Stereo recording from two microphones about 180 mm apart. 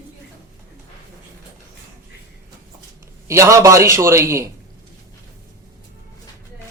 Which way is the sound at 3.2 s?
15° right (ahead or behind).